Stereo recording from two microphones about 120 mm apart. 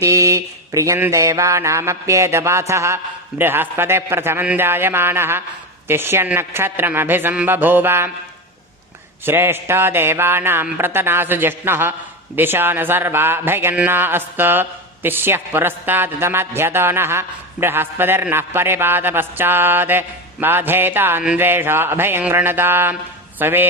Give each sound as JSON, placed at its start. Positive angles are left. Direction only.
{"t": 0.0, "sound": "mantra", "side_deg": -25}
{"t": 9.2, "sound": "mantra", "side_deg": -20}
{"t": 12.4, "sound": "a man's voice", "side_deg": -15}